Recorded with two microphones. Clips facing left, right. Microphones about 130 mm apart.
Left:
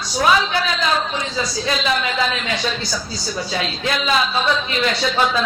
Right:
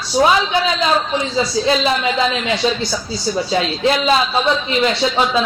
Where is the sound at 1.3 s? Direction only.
30° right (ahead or behind).